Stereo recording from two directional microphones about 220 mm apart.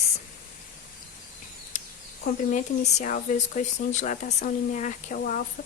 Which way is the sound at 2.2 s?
35° left (ahead or behind).